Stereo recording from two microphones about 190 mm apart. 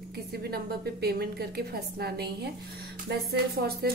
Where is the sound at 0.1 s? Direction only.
55° right (ahead or behind).